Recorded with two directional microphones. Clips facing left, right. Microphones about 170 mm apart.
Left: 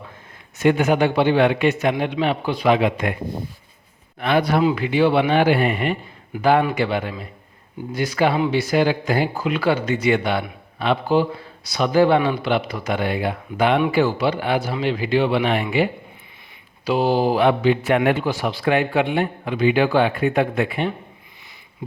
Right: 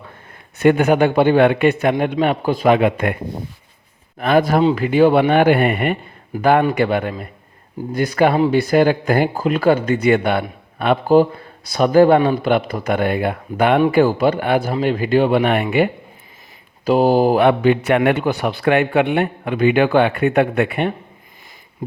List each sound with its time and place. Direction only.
0.6 s a man's voice: 55° right (ahead or behind)
4.2 s a man's voice: 45° right (ahead or behind)
16.8 s a man's voice: 45° right (ahead or behind); by 20.9 s 65° right (ahead or behind)